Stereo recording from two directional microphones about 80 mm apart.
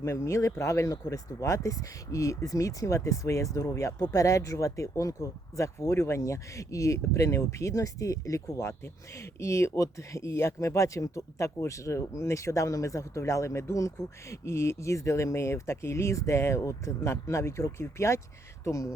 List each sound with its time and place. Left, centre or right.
0.0 s speech: left